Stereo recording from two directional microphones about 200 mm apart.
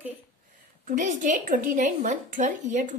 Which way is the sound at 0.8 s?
40° right (ahead or behind).